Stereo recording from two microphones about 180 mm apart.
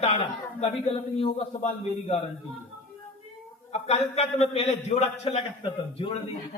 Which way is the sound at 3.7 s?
35° left (ahead or behind).